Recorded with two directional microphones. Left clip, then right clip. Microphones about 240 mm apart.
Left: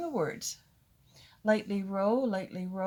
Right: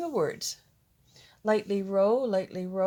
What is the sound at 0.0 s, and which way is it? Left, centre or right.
Speech, right.